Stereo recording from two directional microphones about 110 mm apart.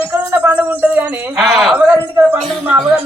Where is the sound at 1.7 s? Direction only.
20° right (ahead or behind).